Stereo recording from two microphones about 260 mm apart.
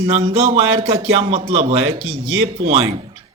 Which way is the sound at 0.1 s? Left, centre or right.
Right.